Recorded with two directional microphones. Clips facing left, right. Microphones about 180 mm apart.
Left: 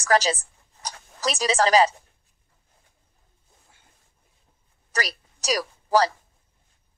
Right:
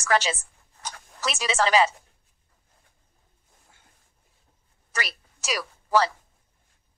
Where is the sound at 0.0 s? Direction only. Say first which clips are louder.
Left 3 dB; 40° left (ahead or behind).